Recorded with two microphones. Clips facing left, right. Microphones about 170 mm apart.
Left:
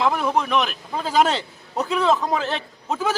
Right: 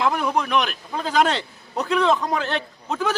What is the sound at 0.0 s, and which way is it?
A man's voice, centre (ahead or behind).